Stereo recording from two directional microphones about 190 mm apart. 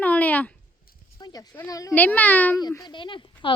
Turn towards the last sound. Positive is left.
turn(degrees=25)  # may be behind; listen again after turning